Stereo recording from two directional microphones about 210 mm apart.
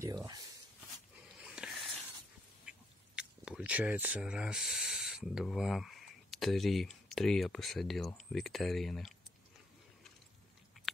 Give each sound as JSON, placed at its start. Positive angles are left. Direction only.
{"t": 0.0, "sound": "speech", "side_deg": -15}
{"t": 1.4, "sound": "a sound", "side_deg": -5}
{"t": 3.2, "sound": "speech", "side_deg": -5}